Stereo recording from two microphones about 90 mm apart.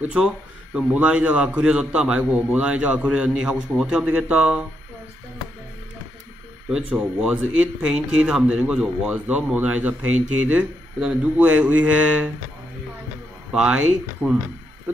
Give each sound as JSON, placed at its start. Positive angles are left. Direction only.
{"t": 0.0, "sound": "a man's voice", "side_deg": -10}
{"t": 6.7, "sound": "a man's voice", "side_deg": -15}
{"t": 13.5, "sound": "a man's voice", "side_deg": -10}